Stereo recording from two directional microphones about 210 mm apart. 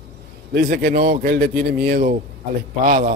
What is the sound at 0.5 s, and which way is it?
A man's voice, 45° right (ahead or behind).